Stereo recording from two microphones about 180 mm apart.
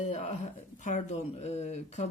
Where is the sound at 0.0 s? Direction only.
40° left (ahead or behind).